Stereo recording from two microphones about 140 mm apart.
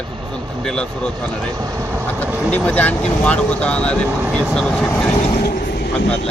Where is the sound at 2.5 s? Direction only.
10° left (ahead or behind).